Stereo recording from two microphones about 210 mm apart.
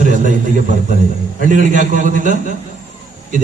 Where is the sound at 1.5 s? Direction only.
40° right (ahead or behind).